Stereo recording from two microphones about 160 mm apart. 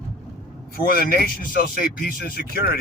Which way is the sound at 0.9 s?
70° left (ahead or behind).